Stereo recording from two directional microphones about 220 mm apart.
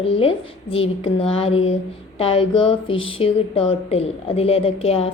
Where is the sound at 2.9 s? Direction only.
65° left (ahead or behind).